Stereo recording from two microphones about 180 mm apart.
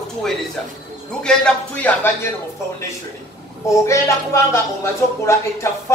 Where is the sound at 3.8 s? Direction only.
15° left (ahead or behind).